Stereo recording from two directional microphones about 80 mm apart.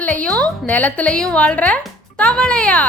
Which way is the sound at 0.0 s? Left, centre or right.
Centre.